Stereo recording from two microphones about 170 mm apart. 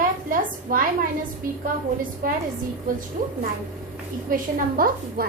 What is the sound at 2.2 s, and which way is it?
Speech, 55° right (ahead or behind).